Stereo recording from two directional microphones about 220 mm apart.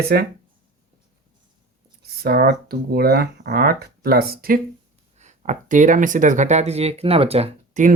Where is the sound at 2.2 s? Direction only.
45° right (ahead or behind).